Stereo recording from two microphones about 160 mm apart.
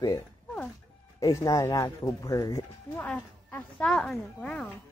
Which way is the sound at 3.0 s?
10° left (ahead or behind).